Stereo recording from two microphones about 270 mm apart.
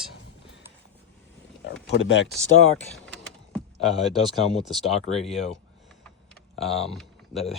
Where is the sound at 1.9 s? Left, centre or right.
Left.